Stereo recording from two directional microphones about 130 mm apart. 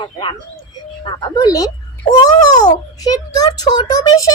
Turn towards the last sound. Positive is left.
turn(degrees=30)  # may be behind; listen again after turning